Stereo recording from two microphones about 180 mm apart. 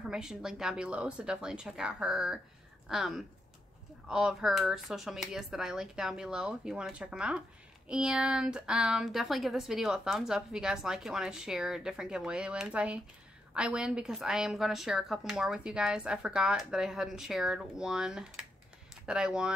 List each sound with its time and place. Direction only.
0.1 s a woman's voice: 5° right (ahead or behind)